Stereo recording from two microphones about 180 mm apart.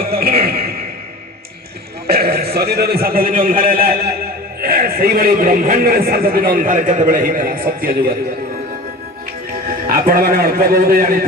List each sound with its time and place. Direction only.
0.1 s a sound: 55° right (ahead or behind)
2.0 s a man's voice: 60° right (ahead or behind)
9.6 s a man's voice: 55° right (ahead or behind)